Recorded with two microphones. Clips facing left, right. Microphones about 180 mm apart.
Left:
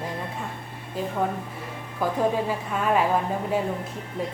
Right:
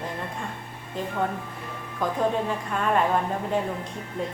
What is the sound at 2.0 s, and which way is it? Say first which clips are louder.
A woman's voice: left 1 dB; 5° left (ahead or behind).